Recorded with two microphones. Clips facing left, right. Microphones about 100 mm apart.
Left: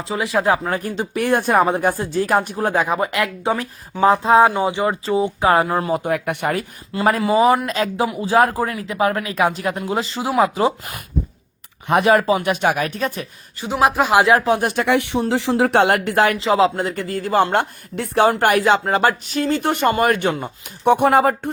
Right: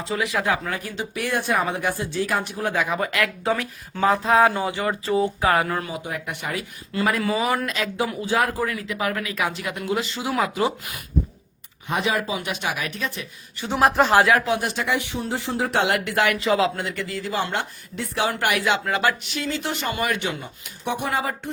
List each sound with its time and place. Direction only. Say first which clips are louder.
0.1 s speech: left 5 dB; 30° left (ahead or behind)
0.8 s speech: left 7 dB; 50° left (ahead or behind)
2.6 s speech: left 5 dB; 35° left (ahead or behind)
2.8 s speech: left 4 dB; 25° left (ahead or behind)
5.9 s speech: left 10 dB; 60° left (ahead or behind)
6.9 s speech: left 6 dB; 40° left (ahead or behind)
11.9 s speech: left 9 dB; 55° left (ahead or behind)
13.9 s speech: even; 10° left (ahead or behind)
14.3 s speech: left 4 dB; 30° left (ahead or behind)
14.6 s speech: left 7 dB; 55° left (ahead or behind)
16.0 s speech: left 4 dB; 35° left (ahead or behind); by 18.3 s 50° left (ahead or behind)
18.3 s speech: left 7 dB; 40° left (ahead or behind)